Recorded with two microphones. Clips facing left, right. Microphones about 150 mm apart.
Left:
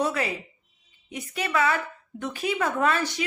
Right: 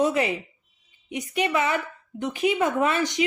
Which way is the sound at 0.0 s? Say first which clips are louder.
Right 4 dB; 20° right (ahead or behind).